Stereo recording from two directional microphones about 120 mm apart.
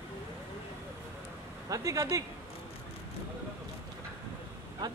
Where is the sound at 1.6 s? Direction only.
30° right (ahead or behind).